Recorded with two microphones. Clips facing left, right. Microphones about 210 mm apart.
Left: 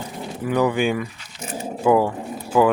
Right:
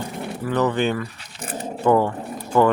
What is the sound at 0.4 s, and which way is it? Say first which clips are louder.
Speech: left 1 dB; 10° left (ahead or behind).